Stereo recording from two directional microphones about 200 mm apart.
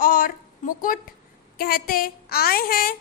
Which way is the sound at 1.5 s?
45° left (ahead or behind).